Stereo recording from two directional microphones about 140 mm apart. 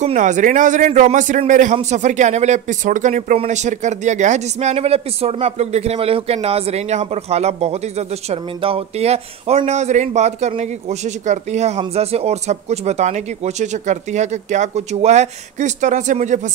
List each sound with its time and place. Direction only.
0.0 s speech: 60° right (ahead or behind)